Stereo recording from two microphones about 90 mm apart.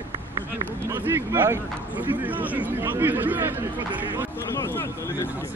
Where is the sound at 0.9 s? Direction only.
25° right (ahead or behind).